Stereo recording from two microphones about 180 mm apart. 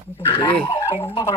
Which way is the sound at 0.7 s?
20° left (ahead or behind).